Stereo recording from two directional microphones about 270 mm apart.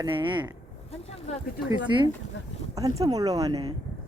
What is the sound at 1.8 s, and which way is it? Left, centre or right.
Speech, centre.